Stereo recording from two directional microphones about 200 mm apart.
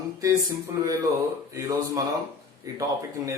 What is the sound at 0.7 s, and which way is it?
A man's voice, 15° right (ahead or behind).